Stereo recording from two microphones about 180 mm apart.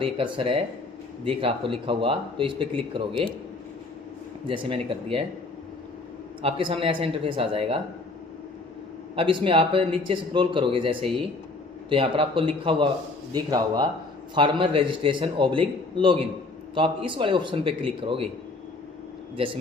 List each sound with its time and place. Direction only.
0.0 s speech: 30° right (ahead or behind)
4.4 s speech: 30° right (ahead or behind)
6.4 s speech: 30° right (ahead or behind)
9.1 s speech: 30° right (ahead or behind)